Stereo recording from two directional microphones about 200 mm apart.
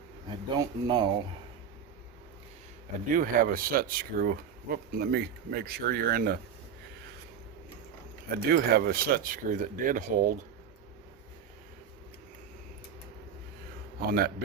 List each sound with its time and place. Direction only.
0.3 s speech: 20° right (ahead or behind)
3.1 s speech: 45° right (ahead or behind)
8.4 s speech: 50° right (ahead or behind)
14.1 s speech: 50° right (ahead or behind)